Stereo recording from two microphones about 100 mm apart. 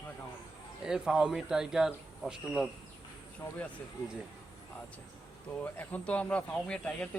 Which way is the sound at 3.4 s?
45° left (ahead or behind).